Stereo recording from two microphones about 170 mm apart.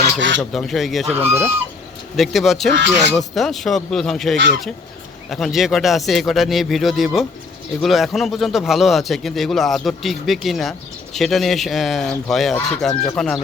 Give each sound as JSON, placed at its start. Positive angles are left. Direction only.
{"t": 0.0, "sound": "speech", "side_deg": -90}
{"t": 0.5, "sound": "speech", "side_deg": 0}
{"t": 1.1, "sound": "speech", "side_deg": -15}
{"t": 2.1, "sound": "speech", "side_deg": 0}